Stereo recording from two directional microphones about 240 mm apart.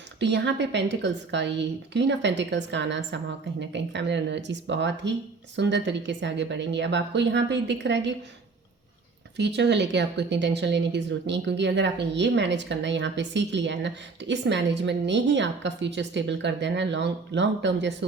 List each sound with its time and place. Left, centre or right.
0.2 s speech: right
9.4 s speech: right